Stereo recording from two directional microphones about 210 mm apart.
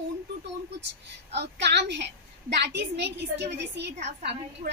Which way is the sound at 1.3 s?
55° right (ahead or behind).